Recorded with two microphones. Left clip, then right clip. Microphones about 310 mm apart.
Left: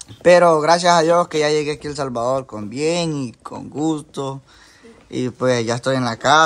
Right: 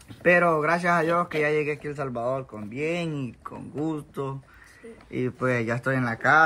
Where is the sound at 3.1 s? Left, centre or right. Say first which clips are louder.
Left 7 dB; centre.